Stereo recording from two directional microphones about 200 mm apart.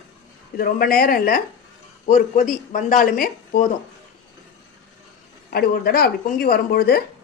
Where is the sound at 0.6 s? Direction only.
45° left (ahead or behind).